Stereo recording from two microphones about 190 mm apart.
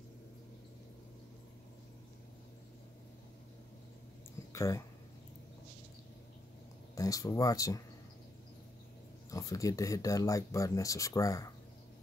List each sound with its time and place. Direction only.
4.5 s speech: 15° left (ahead or behind)
7.0 s speech: 20° left (ahead or behind)
9.3 s speech: 15° left (ahead or behind)